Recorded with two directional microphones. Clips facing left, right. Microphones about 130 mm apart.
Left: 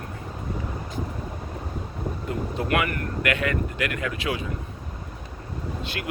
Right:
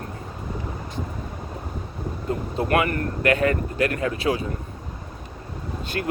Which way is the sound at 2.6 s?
30° right (ahead or behind).